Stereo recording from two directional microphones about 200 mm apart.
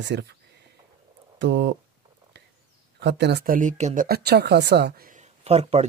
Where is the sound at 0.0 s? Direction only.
60° right (ahead or behind).